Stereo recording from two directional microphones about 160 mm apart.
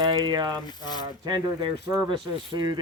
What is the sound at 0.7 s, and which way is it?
Mechanisms, 25° left (ahead or behind).